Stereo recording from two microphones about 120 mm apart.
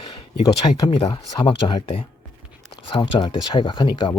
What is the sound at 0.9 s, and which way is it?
Speech, 50° left (ahead or behind).